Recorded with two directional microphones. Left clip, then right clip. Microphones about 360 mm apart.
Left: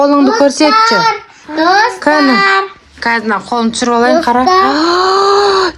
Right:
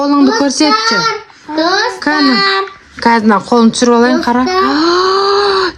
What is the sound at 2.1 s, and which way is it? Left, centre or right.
Speech, centre.